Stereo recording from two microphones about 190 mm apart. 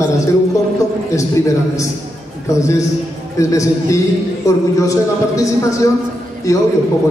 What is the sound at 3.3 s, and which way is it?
A man's voice, 15° left (ahead or behind).